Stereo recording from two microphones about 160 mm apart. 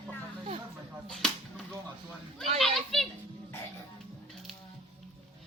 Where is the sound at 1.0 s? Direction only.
5° left (ahead or behind).